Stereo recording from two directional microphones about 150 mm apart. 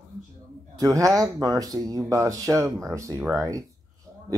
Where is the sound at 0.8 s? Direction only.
20° right (ahead or behind).